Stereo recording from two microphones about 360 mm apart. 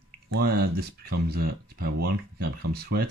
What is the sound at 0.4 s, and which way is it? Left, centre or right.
Speech, right.